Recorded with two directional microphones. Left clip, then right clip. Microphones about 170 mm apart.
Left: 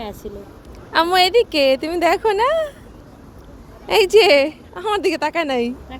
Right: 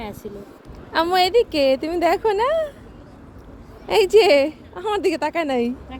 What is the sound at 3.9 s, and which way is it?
A woman's voice, 20° right (ahead or behind).